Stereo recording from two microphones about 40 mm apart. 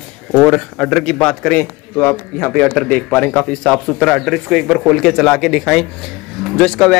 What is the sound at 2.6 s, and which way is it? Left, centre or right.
Speech, left.